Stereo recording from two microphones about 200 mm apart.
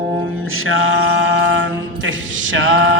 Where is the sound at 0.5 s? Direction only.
90° right.